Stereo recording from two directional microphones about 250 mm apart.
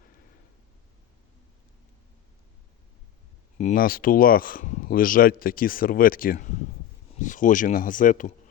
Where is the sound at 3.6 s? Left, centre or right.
Left.